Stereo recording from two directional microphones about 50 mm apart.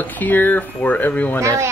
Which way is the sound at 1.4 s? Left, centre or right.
Right.